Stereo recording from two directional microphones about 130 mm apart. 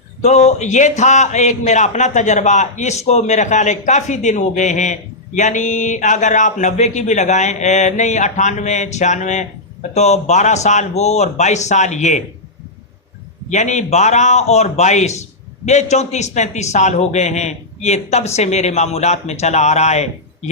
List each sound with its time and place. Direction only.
0.2 s speech: 60° left (ahead or behind)
13.5 s speech: 65° left (ahead or behind)